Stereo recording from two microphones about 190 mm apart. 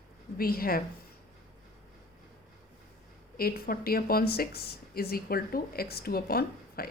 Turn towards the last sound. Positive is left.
turn(degrees=55)  # may be behind; listen again after turning